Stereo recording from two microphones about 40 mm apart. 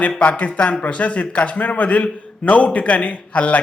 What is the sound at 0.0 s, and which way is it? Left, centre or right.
Speech, left.